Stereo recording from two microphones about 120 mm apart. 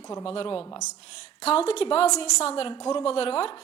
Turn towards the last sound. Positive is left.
turn(degrees=50)  # may be behind; listen again after turning